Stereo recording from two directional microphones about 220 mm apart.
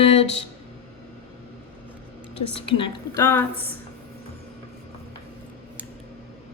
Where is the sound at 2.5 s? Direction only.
25° left (ahead or behind).